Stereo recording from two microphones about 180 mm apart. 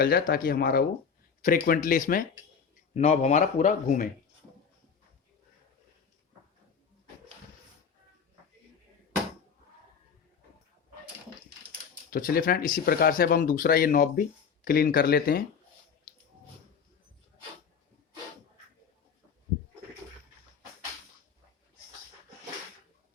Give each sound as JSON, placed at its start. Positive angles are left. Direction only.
{"t": 0.0, "sound": "speech", "side_deg": 55}
{"t": 2.9, "sound": "a man's voice", "side_deg": 40}
{"t": 12.1, "sound": "speech", "side_deg": 50}